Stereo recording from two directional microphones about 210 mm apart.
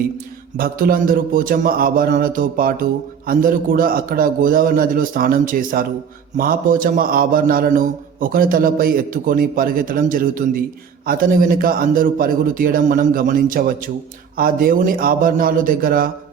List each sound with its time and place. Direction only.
0.5 s a man's voice: 45° right (ahead or behind)